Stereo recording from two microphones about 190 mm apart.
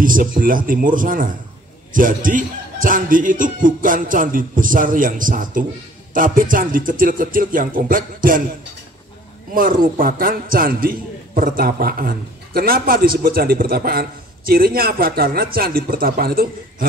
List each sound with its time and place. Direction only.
0.0 s a man's voice: 45° right (ahead or behind)
9.5 s a man's voice: 45° right (ahead or behind)